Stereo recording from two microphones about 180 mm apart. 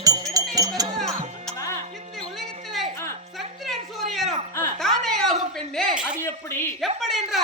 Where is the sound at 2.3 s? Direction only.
Centre (ahead or behind).